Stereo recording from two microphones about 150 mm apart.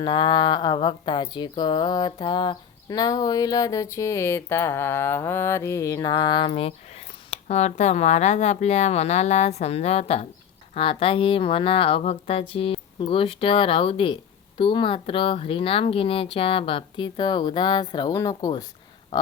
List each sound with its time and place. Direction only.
0.0 s speech: 30° left (ahead or behind)